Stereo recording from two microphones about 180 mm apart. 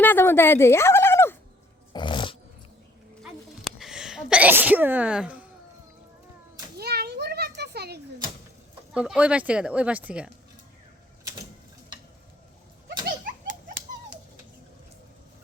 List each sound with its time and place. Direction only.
0.0 s turkey: 10° left (ahead or behind)
1.9 s dog: 25° left (ahead or behind)
3.2 s sneeze: centre (ahead or behind)
6.7 s children playing: 60° right (ahead or behind)
8.9 s speech: 5° right (ahead or behind)